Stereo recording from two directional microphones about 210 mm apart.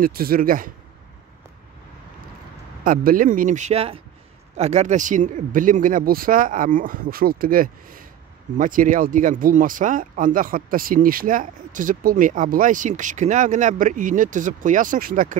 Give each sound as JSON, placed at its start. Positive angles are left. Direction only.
{"t": 0.0, "sound": "speech", "side_deg": -45}
{"t": 2.8, "sound": "speech", "side_deg": -40}